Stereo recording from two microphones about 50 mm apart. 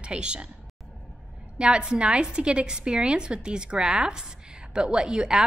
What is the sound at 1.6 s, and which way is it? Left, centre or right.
A woman's voice, centre.